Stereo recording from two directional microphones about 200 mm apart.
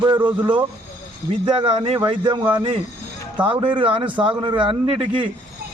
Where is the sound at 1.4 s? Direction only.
25° right (ahead or behind).